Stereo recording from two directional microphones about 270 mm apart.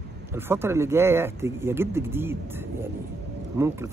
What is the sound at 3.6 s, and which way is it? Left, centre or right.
Speech, centre.